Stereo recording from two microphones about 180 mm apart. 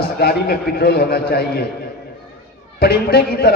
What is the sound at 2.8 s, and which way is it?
Speech, 60° left (ahead or behind).